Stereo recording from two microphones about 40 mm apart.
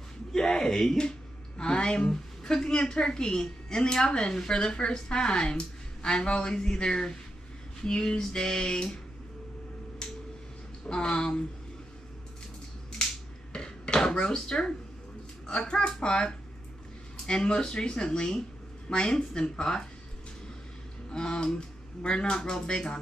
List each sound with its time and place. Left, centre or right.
0.3 s a child's voice: centre
10.9 s a woman's voice: centre
13.0 s a sound: left
15.4 s a child's voice: centre
21.1 s a woman's voice: centre